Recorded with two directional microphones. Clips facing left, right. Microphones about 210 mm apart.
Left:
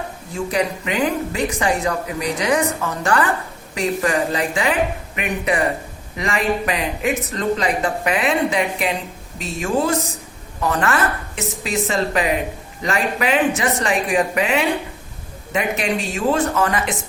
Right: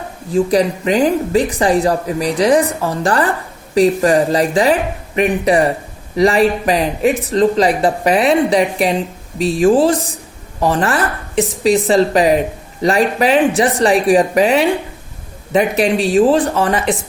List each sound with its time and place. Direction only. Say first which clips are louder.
0.3 s a woman's voice: right 8 dB; 35° right (ahead or behind)